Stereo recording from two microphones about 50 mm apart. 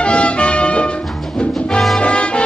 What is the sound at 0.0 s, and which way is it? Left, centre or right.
Music, left.